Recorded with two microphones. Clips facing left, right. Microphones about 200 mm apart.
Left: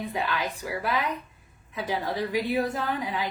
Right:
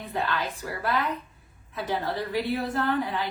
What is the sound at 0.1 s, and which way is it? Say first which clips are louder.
A woman's voice: even; 10° left (ahead or behind).